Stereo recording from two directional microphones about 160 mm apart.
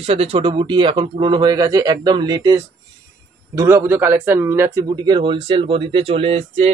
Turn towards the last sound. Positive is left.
turn(degrees=-40)  # may be behind; listen again after turning